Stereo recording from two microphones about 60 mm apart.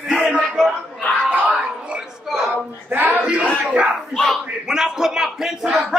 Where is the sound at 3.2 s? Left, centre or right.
Centre.